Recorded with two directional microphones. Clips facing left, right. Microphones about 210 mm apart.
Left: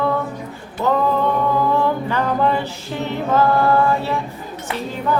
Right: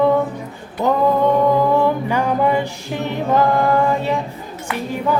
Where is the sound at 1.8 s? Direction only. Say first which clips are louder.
Right 2 dB; 10° right (ahead or behind).